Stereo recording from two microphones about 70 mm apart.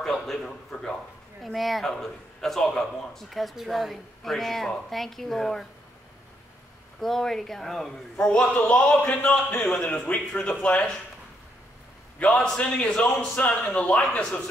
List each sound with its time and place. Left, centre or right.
0.0 s a sound: centre
1.4 s speech: centre
7.0 s speech: centre
12.2 s speech: centre